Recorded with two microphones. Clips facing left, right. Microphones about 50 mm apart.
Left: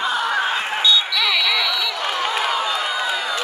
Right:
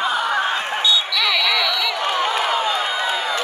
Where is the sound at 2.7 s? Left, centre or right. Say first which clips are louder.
Right 1 dB; right.